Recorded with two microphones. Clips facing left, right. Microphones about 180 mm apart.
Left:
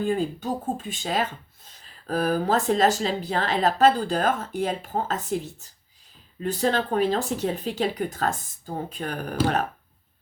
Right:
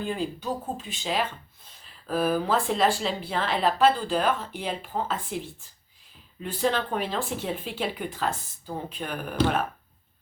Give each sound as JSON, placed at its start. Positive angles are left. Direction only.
{"t": 0.0, "sound": "speech", "side_deg": 45}